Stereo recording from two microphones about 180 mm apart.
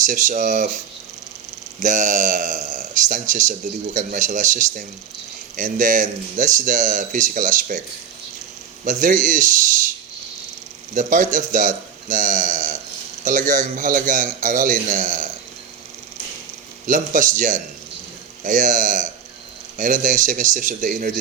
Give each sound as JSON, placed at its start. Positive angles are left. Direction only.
{"t": 0.0, "sound": "speech", "side_deg": -45}
{"t": 1.8, "sound": "speech", "side_deg": -45}
{"t": 8.8, "sound": "speech", "side_deg": -45}
{"t": 10.9, "sound": "speech", "side_deg": -45}
{"t": 16.8, "sound": "speech", "side_deg": -45}